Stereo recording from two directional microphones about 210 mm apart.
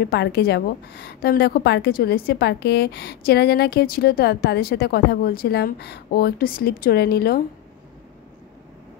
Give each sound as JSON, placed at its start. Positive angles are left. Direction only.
{"t": 0.1, "sound": "a woman's voice", "side_deg": 50}